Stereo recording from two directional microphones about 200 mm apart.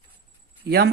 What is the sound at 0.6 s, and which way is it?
Speech, 50° right (ahead or behind).